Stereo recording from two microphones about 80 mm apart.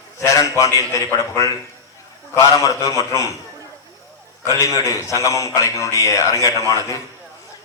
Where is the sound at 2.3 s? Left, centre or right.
Left.